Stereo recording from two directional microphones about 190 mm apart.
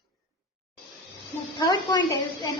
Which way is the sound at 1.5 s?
20° left (ahead or behind).